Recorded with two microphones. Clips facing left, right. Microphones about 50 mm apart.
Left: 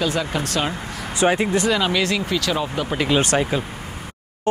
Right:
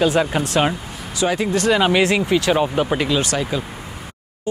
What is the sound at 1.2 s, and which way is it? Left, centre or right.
Speech, left.